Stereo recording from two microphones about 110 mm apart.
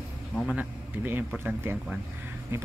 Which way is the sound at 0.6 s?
15° right (ahead or behind).